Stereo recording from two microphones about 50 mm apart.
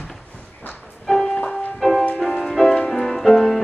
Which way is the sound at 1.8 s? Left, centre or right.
Centre.